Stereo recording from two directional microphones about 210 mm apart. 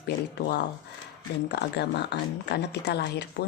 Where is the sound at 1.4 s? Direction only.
50° left (ahead or behind).